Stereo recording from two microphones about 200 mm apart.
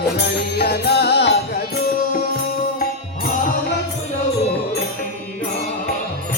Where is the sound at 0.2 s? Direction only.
55° left (ahead or behind).